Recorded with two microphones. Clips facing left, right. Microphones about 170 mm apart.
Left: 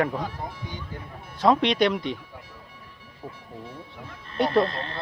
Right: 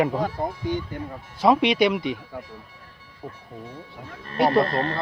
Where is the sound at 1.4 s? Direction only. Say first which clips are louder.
Right 2 dB; 5° right (ahead or behind).